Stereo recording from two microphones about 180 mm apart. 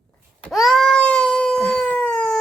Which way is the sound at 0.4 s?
Centre (ahead or behind).